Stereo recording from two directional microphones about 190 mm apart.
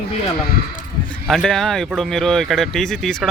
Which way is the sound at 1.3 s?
Centre (ahead or behind).